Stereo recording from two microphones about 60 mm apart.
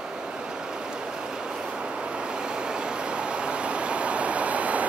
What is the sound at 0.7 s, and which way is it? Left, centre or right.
Vehicle, centre.